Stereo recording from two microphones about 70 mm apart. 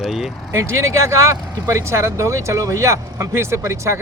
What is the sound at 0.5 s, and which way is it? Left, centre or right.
Speech, right.